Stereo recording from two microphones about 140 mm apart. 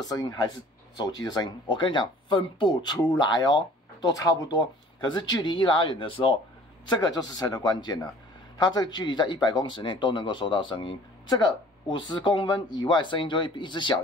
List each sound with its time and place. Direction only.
0.0 s speech: 25° left (ahead or behind)
6.9 s speech: 30° left (ahead or behind)